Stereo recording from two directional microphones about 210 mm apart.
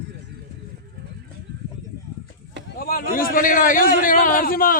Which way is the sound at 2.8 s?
45° left (ahead or behind).